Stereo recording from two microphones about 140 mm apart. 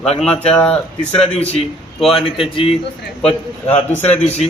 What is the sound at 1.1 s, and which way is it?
Speech, 45° left (ahead or behind).